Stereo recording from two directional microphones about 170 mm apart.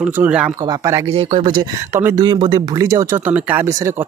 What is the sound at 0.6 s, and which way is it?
Speech, 20° right (ahead or behind).